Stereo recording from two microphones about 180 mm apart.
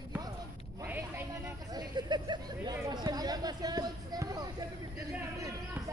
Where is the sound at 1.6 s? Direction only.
25° right (ahead or behind).